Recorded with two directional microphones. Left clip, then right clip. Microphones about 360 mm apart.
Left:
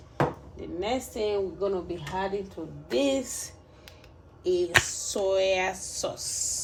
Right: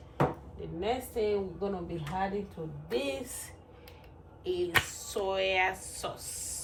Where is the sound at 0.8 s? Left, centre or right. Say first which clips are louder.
Left 2 dB; left.